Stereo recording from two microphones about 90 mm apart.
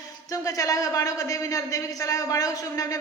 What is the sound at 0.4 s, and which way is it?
A man's voice, 40° left (ahead or behind).